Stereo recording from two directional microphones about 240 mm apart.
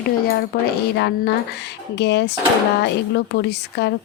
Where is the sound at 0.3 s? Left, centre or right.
Left.